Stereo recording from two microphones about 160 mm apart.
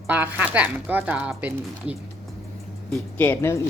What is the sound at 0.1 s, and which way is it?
Speech, 10° right (ahead or behind).